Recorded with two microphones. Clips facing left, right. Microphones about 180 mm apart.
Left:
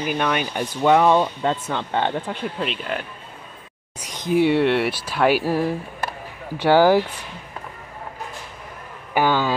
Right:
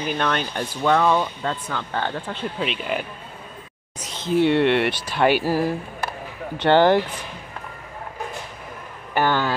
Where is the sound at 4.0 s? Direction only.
15° left (ahead or behind).